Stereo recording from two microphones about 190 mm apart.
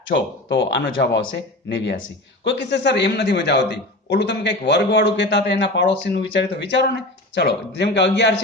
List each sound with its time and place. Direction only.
0.5 s speech: 70° left (ahead or behind)
1.7 s a man's voice: 75° left (ahead or behind)